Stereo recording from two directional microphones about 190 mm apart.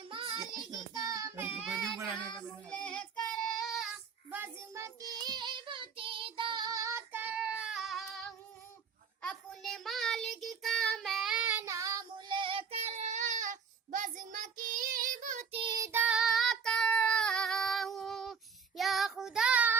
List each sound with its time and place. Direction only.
0.1 s child singing: 30° right (ahead or behind)
15.6 s child singing: 20° right (ahead or behind)